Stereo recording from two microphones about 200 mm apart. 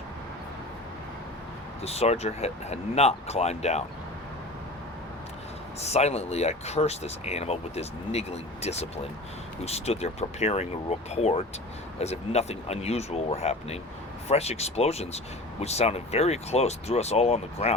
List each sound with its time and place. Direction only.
1.8 s speech: 30° left (ahead or behind)
5.8 s speech: 30° left (ahead or behind)